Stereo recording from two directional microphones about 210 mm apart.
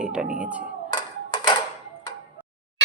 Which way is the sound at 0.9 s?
20° left (ahead or behind).